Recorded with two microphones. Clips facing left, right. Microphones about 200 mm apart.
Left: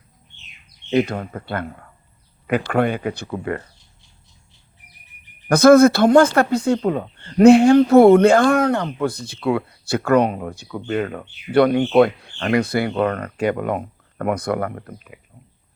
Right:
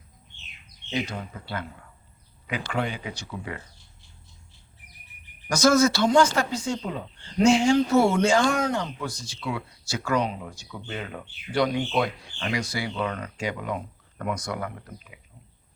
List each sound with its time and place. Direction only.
0.9 s speech: 60° left (ahead or behind)
5.5 s speech: 55° left (ahead or behind)